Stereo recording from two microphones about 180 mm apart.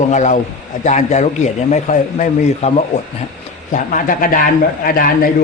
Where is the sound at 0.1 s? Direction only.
40° left (ahead or behind).